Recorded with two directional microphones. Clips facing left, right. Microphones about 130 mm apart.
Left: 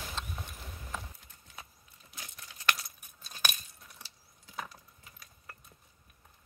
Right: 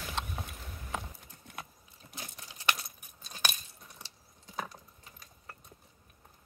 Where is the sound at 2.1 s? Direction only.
30° right (ahead or behind).